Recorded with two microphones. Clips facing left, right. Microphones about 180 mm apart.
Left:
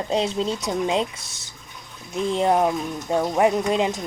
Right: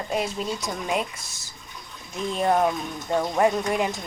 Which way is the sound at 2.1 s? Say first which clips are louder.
Left 3 dB; 20° left (ahead or behind).